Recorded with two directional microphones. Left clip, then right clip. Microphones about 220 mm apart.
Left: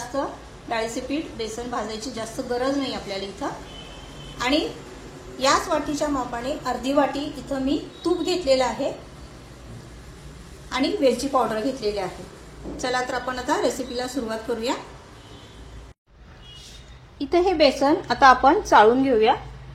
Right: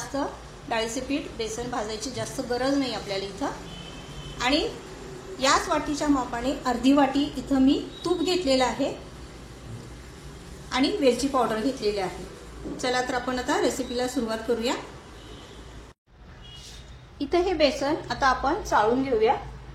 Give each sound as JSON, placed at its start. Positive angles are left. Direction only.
{"t": 0.1, "sound": "a sound", "side_deg": 0}
{"t": 0.9, "sound": "a woman's voice", "side_deg": 0}
{"t": 10.7, "sound": "a woman's voice", "side_deg": 0}
{"t": 17.2, "sound": "a woman's voice", "side_deg": 20}
{"t": 17.6, "sound": "a woman's voice", "side_deg": 0}
{"t": 18.2, "sound": "a woman's voice", "side_deg": 15}
{"t": 19.0, "sound": "a woman's voice", "side_deg": 0}